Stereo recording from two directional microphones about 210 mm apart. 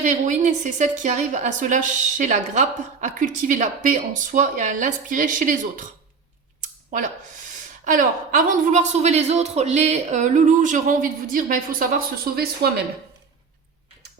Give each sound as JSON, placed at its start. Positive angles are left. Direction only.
{"t": 0.0, "sound": "a woman's voice", "side_deg": -35}
{"t": 6.6, "sound": "a sound", "side_deg": -35}
{"t": 7.9, "sound": "a woman's voice", "side_deg": -40}